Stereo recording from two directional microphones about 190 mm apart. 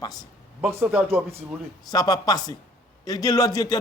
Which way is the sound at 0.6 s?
10° right (ahead or behind).